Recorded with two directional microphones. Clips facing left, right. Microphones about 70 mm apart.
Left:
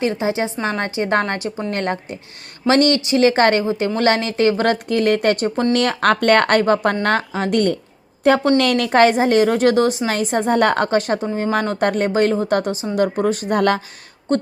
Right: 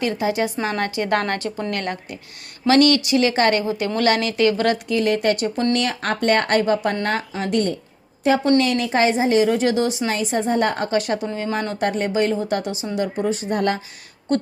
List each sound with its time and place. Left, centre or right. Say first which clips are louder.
0.0 s a woman's voice: left 1 dB; left
1.7 s speech: left 4 dB; left
6.0 s speech: left 5 dB; left
10.9 s speech: left 3 dB; left
13.6 s speech: left 6 dB; left